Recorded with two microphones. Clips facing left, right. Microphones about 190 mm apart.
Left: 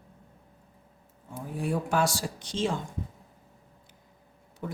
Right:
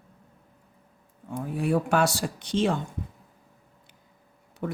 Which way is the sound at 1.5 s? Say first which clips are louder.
Right 4 dB; 65° right (ahead or behind).